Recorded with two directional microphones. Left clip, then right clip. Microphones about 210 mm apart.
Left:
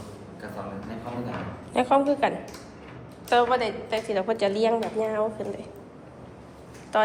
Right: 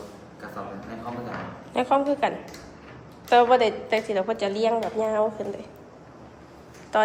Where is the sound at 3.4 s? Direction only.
30° right (ahead or behind).